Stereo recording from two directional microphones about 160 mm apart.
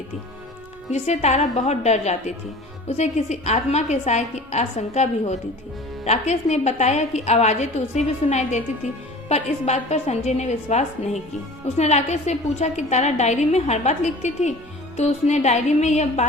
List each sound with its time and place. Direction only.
0.9 s a woman's voice: 45° left (ahead or behind)